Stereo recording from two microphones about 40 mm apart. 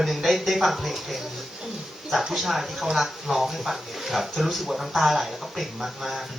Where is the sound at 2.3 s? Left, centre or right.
Centre.